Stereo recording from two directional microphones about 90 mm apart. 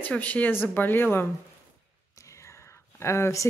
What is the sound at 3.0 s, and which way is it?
Speech, 30° left (ahead or behind).